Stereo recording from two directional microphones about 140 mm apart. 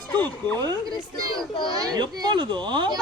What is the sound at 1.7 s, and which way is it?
Speech, 30° right (ahead or behind).